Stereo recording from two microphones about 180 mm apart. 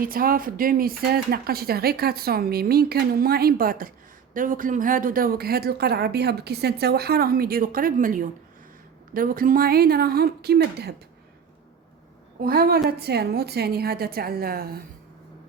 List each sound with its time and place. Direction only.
0.0 s a woman's voice: 55° right (ahead or behind)
12.4 s a woman's voice: 60° right (ahead or behind)